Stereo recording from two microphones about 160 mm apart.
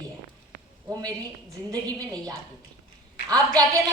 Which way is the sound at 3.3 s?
25° right (ahead or behind).